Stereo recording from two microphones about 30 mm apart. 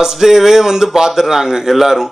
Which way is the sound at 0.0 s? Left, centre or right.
Centre.